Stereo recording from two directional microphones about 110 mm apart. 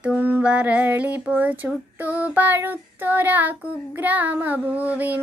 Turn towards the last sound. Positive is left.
turn(degrees=-15)  # may be behind; listen again after turning